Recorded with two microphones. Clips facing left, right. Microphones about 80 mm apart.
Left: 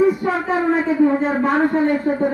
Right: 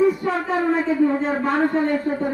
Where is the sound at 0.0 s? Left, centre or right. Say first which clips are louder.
Left 2 dB; centre.